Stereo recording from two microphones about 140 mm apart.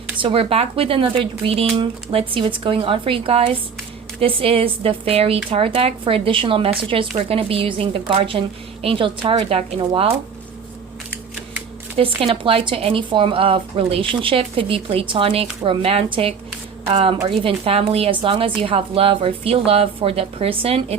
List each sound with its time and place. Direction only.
0.2 s speech: 40° right (ahead or behind)
11.9 s speech: 40° right (ahead or behind)